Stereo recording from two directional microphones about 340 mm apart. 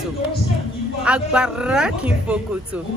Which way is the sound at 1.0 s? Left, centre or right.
Centre.